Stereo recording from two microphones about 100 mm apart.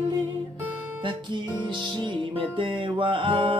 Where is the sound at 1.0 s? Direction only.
55° right (ahead or behind).